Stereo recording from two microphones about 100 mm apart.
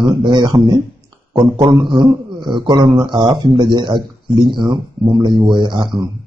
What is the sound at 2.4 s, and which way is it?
A man's voice, 50° right (ahead or behind).